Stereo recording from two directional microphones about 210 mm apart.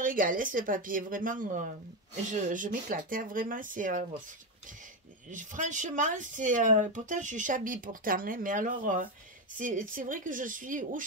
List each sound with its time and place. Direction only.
0.0 s speech: 40° right (ahead or behind)
5.3 s speech: 35° right (ahead or behind)